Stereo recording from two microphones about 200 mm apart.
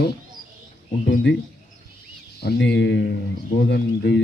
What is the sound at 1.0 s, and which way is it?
Speech, 60° left (ahead or behind).